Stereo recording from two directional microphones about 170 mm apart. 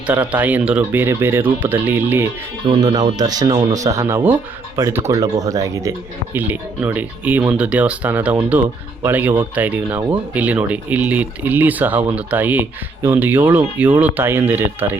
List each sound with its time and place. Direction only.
0.1 s speech: 10° right (ahead or behind)
2.6 s speech: 25° right (ahead or behind)